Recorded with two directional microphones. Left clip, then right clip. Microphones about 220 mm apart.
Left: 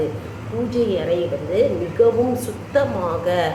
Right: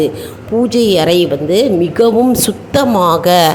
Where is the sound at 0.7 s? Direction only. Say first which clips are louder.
Right 8 dB; 50° right (ahead or behind).